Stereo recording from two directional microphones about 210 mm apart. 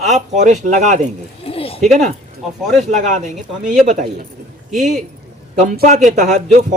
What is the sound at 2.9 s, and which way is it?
A man's voice, 35° right (ahead or behind).